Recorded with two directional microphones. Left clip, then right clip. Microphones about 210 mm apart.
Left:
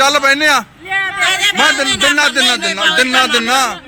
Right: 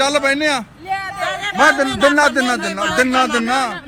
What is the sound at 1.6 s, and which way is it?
A man's voice, 20° right (ahead or behind).